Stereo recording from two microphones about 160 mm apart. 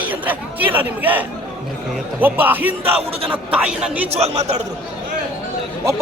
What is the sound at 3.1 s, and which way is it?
Speech, 35° right (ahead or behind).